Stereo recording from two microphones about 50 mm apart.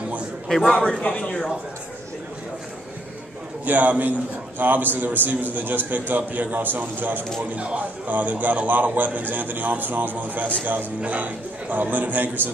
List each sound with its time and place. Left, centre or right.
0.5 s a man's voice: centre
0.7 s speech: centre
3.6 s a man's voice: right
7.5 s a man's voice: right